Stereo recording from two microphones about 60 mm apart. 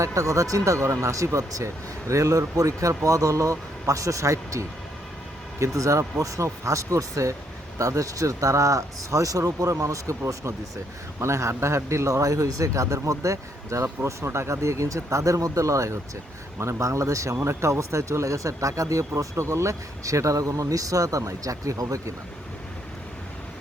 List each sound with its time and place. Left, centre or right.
0.0 s speech: right
11.2 s speech: right
13.8 s speech: right
16.6 s speech: right